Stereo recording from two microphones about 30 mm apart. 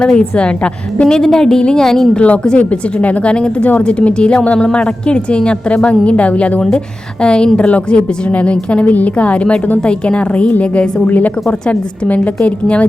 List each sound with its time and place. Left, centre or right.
0.0 s speech: left
1.0 s a woman's voice: left
2.6 s a woman's voice: left
3.2 s speech: left
6.7 s speech: left
8.3 s a woman's voice: left
8.9 s a woman's voice: left
11.0 s a woman's voice: left
12.4 s speech: left